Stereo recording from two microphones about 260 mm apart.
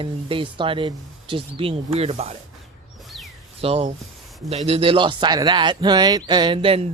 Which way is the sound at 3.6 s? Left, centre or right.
Right.